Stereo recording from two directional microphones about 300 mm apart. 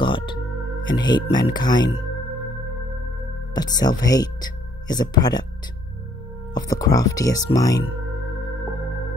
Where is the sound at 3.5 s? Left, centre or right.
Centre.